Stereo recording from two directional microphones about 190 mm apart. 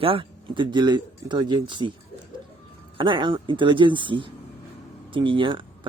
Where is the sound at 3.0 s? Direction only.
25° right (ahead or behind).